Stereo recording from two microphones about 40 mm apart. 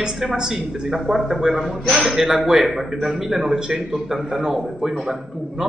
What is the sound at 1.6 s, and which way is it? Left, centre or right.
Speech, centre.